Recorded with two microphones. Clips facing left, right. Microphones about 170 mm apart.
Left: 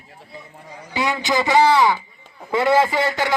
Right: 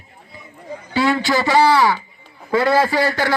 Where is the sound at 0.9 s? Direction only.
15° left (ahead or behind).